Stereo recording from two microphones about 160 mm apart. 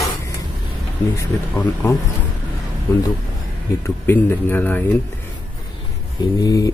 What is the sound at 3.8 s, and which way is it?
A man's voice, 15° left (ahead or behind).